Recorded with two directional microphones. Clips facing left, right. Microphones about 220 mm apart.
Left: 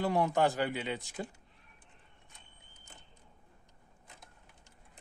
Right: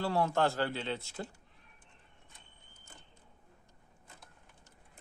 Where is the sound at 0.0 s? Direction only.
15° left (ahead or behind).